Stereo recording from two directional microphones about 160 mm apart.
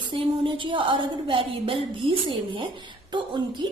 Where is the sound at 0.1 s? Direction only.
30° right (ahead or behind).